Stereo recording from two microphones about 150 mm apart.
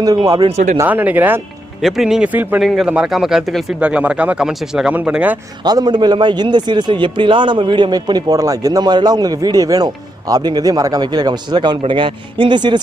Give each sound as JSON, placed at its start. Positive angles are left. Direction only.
{"t": 0.0, "sound": "a man's voice", "side_deg": -25}
{"t": 0.5, "sound": "speech", "side_deg": -50}
{"t": 0.7, "sound": "speech", "side_deg": -10}
{"t": 1.8, "sound": "speech", "side_deg": 0}
{"t": 5.6, "sound": "a man's voice", "side_deg": -30}